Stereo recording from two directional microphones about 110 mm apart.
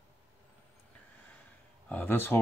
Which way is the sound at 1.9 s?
20° left (ahead or behind).